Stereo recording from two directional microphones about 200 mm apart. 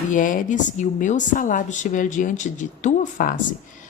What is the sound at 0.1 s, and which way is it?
Speech, 40° left (ahead or behind).